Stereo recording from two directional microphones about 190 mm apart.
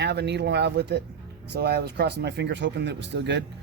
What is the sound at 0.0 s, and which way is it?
Speech, 60° right (ahead or behind).